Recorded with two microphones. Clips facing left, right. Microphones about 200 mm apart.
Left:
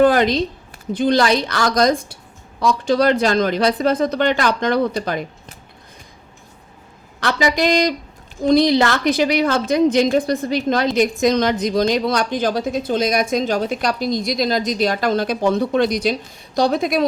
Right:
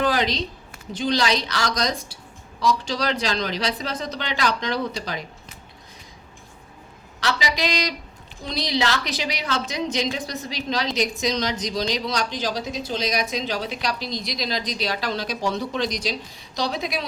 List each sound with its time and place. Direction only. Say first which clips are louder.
0.0 s a woman's voice: left 9 dB; 55° left (ahead or behind)
7.2 s a woman's voice: left 7 dB; 55° left (ahead or behind)